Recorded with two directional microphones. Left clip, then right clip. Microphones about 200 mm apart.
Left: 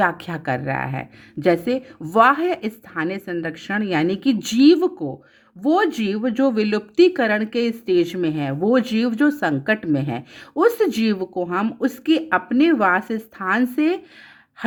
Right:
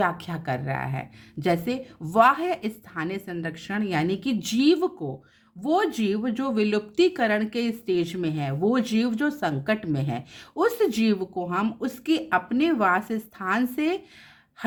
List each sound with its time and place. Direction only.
0.0 s speech: 30° left (ahead or behind)